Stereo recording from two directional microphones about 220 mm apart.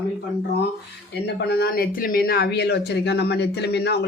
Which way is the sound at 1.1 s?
50° left (ahead or behind).